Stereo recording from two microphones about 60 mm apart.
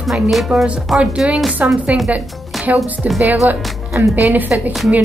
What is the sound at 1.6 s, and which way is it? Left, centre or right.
A woman's voice, right.